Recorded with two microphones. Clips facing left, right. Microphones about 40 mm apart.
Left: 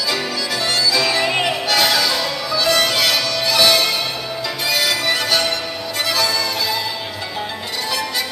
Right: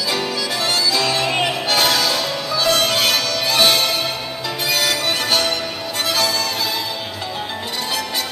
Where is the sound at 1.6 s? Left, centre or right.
Right.